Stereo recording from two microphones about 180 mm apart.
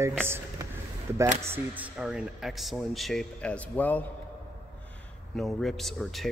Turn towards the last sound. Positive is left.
turn(degrees=0)  # may be behind; listen again after turning